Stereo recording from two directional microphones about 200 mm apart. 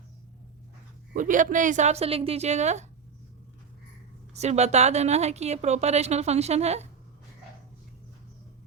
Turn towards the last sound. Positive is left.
turn(degrees=-35)  # may be behind; listen again after turning